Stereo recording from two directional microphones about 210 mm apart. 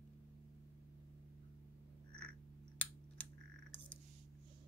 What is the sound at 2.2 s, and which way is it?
Typing, 5° left (ahead or behind).